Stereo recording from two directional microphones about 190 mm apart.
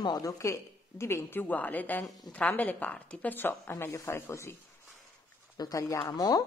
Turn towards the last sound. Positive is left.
turn(degrees=20)  # may be behind; listen again after turning